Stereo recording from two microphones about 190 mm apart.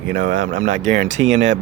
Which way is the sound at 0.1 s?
75° right (ahead or behind).